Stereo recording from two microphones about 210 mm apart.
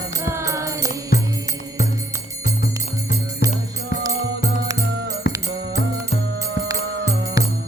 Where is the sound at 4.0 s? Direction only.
15° right (ahead or behind).